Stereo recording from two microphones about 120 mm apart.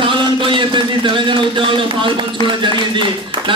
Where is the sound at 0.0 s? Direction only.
45° right (ahead or behind).